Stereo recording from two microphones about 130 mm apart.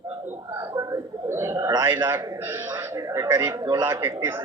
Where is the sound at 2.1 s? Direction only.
25° right (ahead or behind).